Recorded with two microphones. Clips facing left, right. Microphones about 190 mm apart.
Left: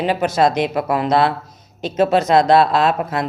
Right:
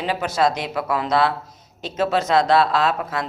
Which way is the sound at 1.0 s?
20° left (ahead or behind).